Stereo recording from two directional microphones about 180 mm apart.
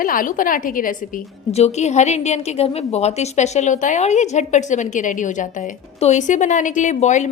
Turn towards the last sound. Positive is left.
turn(degrees=40)  # may be behind; listen again after turning